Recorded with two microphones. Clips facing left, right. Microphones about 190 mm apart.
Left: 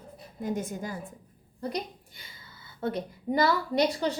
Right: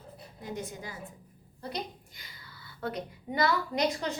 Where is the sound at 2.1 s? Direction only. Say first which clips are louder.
Even; 30° left (ahead or behind).